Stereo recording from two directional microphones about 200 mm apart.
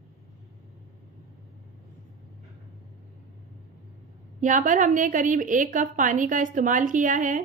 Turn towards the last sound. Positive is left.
turn(degrees=-40)  # may be behind; listen again after turning